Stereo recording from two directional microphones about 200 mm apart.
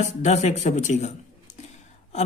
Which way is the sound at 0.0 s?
35° left (ahead or behind).